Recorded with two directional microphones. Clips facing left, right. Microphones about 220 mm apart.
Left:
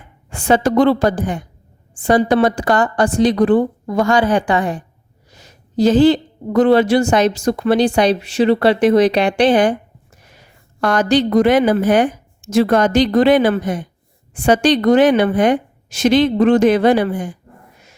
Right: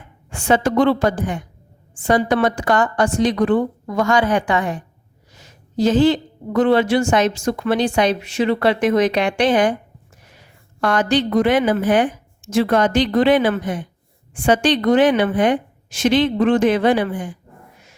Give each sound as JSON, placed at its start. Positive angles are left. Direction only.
{"t": 0.3, "sound": "a woman's voice", "side_deg": 35}
{"t": 10.8, "sound": "a woman's voice", "side_deg": 40}